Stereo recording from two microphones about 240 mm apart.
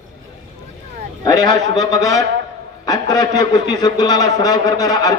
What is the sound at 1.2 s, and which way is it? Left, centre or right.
A man's voice, centre.